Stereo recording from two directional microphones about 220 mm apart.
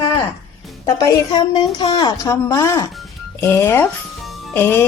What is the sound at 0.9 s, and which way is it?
A woman's voice, 15° left (ahead or behind).